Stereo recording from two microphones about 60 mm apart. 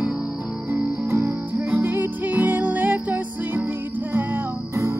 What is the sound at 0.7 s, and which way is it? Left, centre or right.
Music, right.